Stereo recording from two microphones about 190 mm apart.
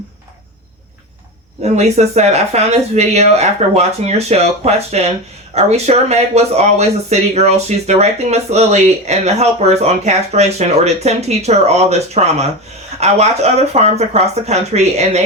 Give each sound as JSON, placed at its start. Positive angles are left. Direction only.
{"t": 1.6, "sound": "speech", "side_deg": -35}